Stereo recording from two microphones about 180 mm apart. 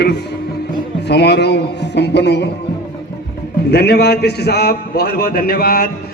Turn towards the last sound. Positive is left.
turn(degrees=55)  # may be behind; listen again after turning